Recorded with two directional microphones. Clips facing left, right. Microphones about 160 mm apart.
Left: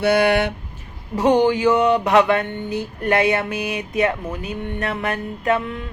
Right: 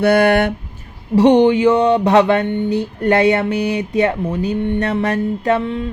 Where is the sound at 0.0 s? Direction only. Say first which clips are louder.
Right 4 dB; 55° right (ahead or behind).